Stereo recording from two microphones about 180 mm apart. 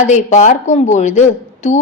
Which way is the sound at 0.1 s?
40° left (ahead or behind).